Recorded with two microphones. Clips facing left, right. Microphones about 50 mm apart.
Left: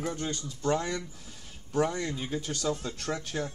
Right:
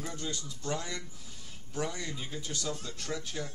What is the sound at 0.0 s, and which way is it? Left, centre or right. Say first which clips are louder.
Speech: left 5 dB; left.